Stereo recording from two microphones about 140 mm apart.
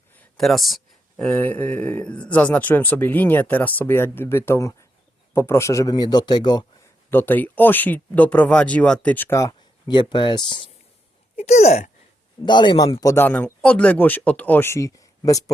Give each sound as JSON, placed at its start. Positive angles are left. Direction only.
{"t": 0.3, "sound": "speech", "side_deg": 0}
{"t": 7.1, "sound": "speech", "side_deg": 15}
{"t": 11.3, "sound": "speech", "side_deg": 50}
{"t": 12.5, "sound": "speech", "side_deg": 35}
{"t": 13.2, "sound": "speech", "side_deg": 10}